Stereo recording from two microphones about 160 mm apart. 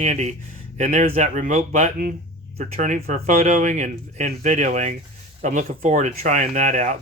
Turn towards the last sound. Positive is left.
turn(degrees=-50)  # may be behind; listen again after turning